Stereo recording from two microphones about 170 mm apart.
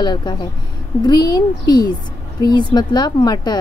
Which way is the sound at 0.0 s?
25° left (ahead or behind).